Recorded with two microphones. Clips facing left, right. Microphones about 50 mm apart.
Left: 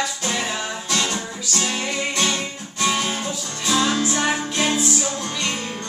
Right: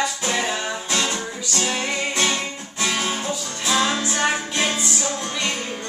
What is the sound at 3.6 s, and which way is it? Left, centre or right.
Music, centre.